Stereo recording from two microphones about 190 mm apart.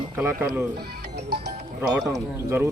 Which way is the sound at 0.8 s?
60° right (ahead or behind).